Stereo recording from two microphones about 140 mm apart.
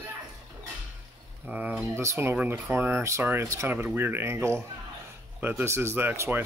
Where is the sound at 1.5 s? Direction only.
10° right (ahead or behind).